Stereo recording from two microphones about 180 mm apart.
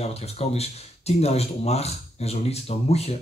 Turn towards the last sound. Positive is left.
turn(degrees=35)  # may be behind; listen again after turning